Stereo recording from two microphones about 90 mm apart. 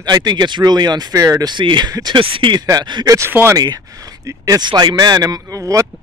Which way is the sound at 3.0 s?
35° right (ahead or behind).